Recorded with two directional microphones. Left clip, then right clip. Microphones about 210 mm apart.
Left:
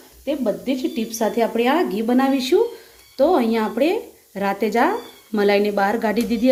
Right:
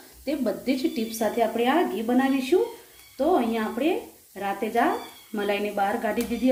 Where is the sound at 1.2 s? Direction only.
45° left (ahead or behind).